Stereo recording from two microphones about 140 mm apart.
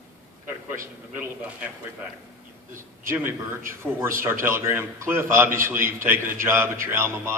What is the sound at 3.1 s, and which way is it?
A man's voice, 15° right (ahead or behind).